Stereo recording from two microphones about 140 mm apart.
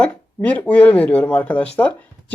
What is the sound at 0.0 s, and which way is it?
Speech, 10° left (ahead or behind).